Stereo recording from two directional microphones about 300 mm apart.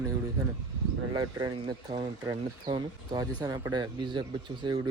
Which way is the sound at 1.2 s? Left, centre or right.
Centre.